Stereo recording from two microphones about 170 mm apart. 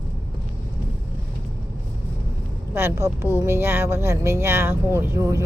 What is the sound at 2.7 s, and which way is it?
Speech, 15° right (ahead or behind).